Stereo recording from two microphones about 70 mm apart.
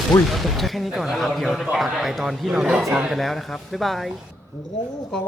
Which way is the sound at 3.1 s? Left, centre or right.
Centre.